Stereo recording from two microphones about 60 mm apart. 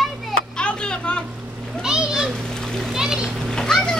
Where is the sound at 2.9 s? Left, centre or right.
Centre.